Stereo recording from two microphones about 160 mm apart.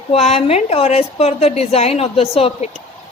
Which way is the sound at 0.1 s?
40° left (ahead or behind).